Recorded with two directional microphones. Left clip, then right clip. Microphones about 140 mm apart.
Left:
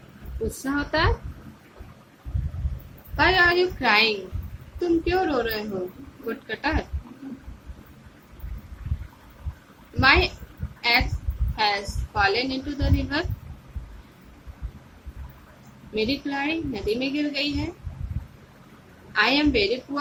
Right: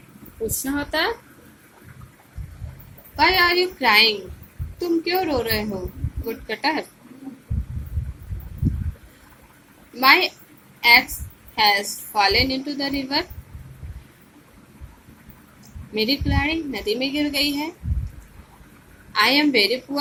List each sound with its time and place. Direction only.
0.6 s a woman's voice: 20° right (ahead or behind)
3.2 s a woman's voice: 25° right (ahead or behind)
10.0 s a woman's voice: 25° right (ahead or behind)
10.8 s a sound: 25° right (ahead or behind)
11.6 s a woman's voice: 25° right (ahead or behind)
16.0 s a woman's voice: 25° right (ahead or behind)
19.1 s a woman's voice: 25° right (ahead or behind)